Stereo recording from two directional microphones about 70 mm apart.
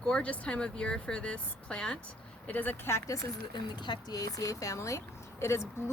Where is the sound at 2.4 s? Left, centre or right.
Left.